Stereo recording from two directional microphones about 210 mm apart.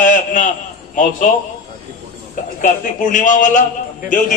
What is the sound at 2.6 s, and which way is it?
A man's voice, 40° left (ahead or behind).